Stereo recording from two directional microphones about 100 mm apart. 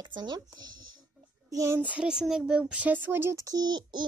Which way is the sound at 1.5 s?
35° right (ahead or behind).